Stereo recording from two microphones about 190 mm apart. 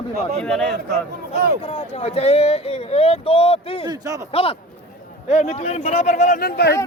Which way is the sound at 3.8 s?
20° right (ahead or behind).